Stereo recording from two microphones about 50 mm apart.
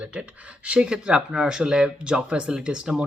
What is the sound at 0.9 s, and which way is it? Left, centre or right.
Speech, centre.